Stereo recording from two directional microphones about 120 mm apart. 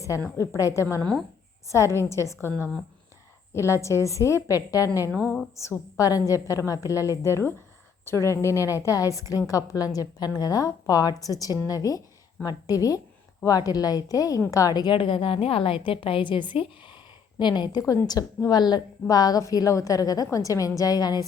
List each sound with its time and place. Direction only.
0.3 s a woman's voice: 25° left (ahead or behind)
3.5 s a woman's voice: 25° left (ahead or behind)
5.1 s a woman's voice: 5° left (ahead or behind)
5.5 s a woman's voice: 25° left (ahead or behind)